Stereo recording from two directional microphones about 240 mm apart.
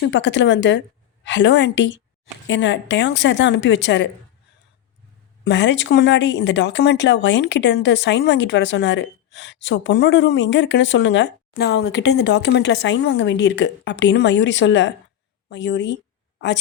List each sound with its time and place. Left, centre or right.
0.1 s speech: left
5.5 s speech: left